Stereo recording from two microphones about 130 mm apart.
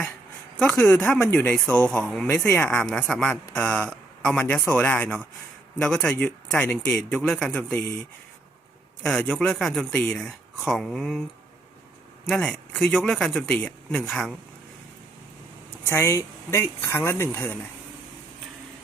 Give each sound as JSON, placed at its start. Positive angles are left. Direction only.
{"t": 0.6, "sound": "a man's voice", "side_deg": 10}
{"t": 9.0, "sound": "speech", "side_deg": 5}
{"t": 12.2, "sound": "speech", "side_deg": 5}
{"t": 15.9, "sound": "a woman's voice", "side_deg": 20}